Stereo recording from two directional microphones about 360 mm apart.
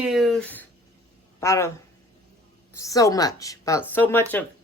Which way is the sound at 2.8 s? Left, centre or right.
Centre.